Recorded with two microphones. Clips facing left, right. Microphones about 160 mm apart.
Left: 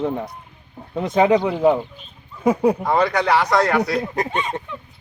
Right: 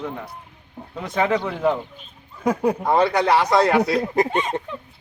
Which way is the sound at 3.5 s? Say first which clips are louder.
Right 2 dB; 25° right (ahead or behind).